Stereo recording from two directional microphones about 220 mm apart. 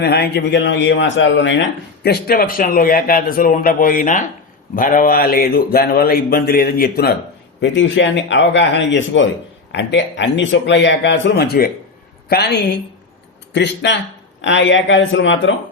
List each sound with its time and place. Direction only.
0.0 s a man's voice: 50° left (ahead or behind)
2.0 s speech: 45° left (ahead or behind)
7.6 s a man's voice: 55° left (ahead or behind)